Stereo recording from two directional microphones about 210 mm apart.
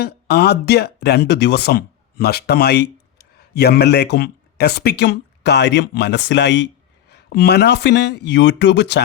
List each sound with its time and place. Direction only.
0.0 s speech: 50° left (ahead or behind)